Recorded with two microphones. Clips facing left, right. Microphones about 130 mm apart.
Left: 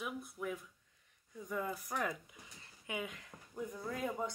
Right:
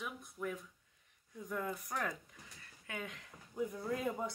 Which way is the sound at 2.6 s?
15° left (ahead or behind).